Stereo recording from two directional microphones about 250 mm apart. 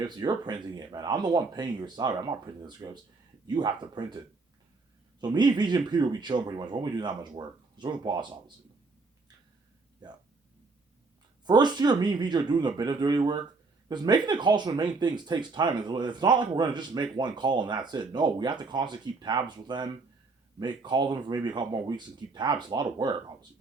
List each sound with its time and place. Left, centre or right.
0.0 s speech: centre
5.2 s speech: centre
11.4 s speech: centre